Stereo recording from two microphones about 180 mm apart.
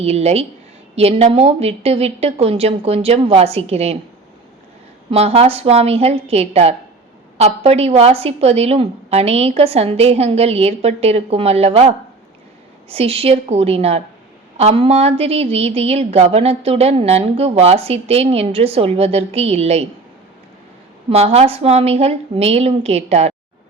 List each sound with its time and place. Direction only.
0.0 s a woman's voice: 35° right (ahead or behind)
5.1 s a woman's voice: 35° right (ahead or behind)
21.1 s a woman's voice: 35° right (ahead or behind)